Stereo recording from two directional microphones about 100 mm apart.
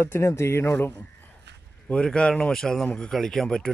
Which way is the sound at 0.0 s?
25° left (ahead or behind).